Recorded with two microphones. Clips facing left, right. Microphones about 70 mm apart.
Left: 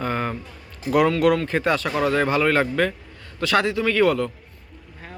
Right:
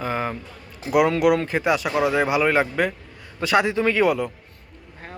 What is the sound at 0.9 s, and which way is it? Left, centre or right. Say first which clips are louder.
A man's voice: even; centre.